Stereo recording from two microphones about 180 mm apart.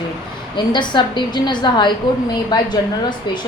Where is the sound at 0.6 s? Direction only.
25° left (ahead or behind).